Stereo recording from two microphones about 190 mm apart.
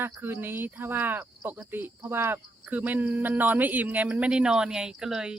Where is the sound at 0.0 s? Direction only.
10° right (ahead or behind).